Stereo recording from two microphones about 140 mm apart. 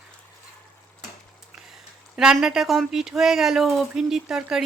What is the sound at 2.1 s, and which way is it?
Speech, 5° right (ahead or behind).